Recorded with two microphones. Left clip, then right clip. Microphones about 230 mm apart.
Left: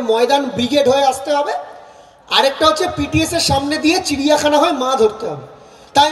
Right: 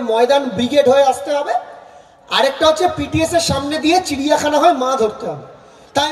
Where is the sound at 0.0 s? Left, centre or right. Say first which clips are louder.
Even; left.